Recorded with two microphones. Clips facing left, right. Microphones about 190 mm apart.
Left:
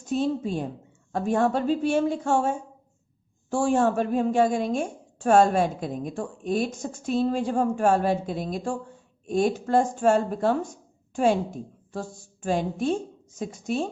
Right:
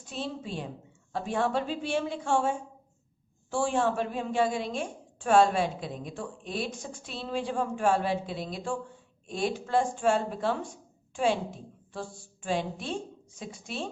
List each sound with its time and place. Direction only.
0.0 s a woman's voice: 45° left (ahead or behind)